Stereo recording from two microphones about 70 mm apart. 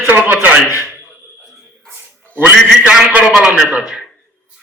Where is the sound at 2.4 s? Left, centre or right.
Centre.